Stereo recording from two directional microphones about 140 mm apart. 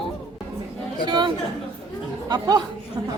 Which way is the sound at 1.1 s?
30° right (ahead or behind).